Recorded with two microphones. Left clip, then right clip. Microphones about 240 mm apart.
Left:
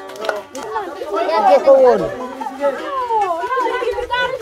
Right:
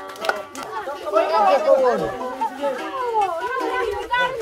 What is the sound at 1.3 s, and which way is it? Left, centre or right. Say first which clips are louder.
Speech: left 7 dB; left.